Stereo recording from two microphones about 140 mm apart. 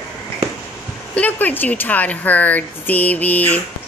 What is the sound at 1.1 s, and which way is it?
Speech, 10° left (ahead or behind).